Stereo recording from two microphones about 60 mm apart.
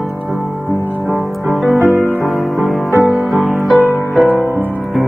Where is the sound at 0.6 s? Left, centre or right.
Right.